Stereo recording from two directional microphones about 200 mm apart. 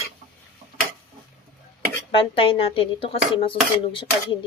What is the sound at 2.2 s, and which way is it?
Speech, 25° left (ahead or behind).